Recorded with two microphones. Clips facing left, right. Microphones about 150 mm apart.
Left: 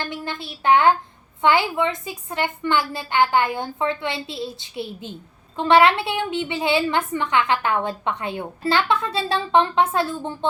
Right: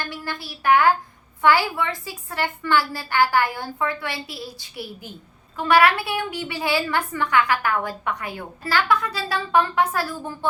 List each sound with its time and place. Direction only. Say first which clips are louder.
0.0 s a woman's voice: left 2 dB; 20° left (ahead or behind)